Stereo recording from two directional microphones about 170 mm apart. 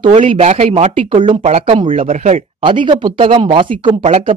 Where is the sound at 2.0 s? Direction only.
45° right (ahead or behind).